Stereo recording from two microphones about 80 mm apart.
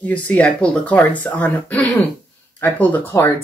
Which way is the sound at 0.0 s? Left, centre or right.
Centre.